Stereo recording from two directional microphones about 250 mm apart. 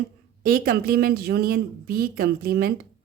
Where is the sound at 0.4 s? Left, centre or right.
Right.